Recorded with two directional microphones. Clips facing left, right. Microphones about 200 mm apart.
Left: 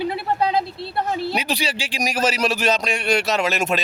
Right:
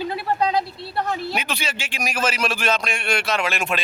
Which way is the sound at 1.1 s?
30° left (ahead or behind).